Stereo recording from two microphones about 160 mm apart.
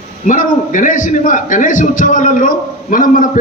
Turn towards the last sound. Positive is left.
turn(degrees=60)  # may be behind; listen again after turning